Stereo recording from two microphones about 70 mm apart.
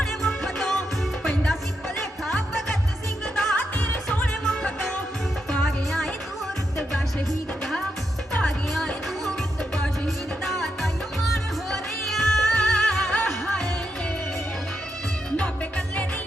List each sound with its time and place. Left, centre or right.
0.0 s music: centre
3.6 s music: left
5.6 s music: centre
8.3 s music: centre
10.4 s music: centre
11.7 s music: centre